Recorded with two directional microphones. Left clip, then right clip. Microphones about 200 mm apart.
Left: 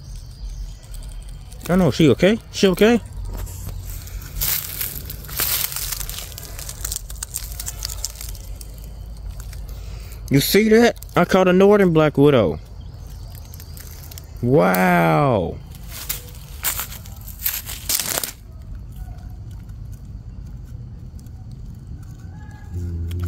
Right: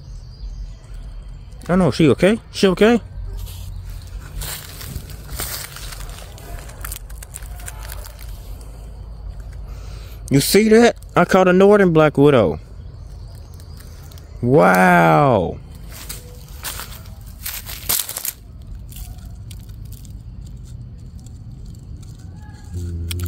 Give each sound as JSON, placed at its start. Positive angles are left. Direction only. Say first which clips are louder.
{"t": 1.7, "sound": "speech", "louder": "right 1 dB", "side_deg": 0}
{"t": 4.4, "sound": "crushing", "louder": "left 5 dB", "side_deg": 0}
{"t": 5.4, "sound": "crumpling", "louder": "left 5 dB", "side_deg": 15}
{"t": 7.5, "sound": "a sound", "louder": "left 4 dB", "side_deg": 15}
{"t": 10.2, "sound": "speech", "louder": "right 2 dB", "side_deg": -5}
{"t": 14.4, "sound": "speech", "louder": "right 4 dB", "side_deg": -5}
{"t": 16.1, "sound": "a sound", "louder": "left 5 dB", "side_deg": 25}
{"t": 17.4, "sound": "crushing", "louder": "left 1 dB", "side_deg": -10}